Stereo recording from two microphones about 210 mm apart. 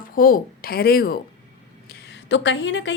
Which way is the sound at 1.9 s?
55° left (ahead or behind).